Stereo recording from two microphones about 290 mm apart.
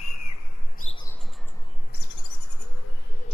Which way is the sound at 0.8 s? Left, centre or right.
Left.